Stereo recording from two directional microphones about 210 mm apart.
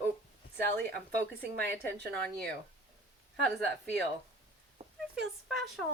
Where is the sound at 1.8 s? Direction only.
5° left (ahead or behind).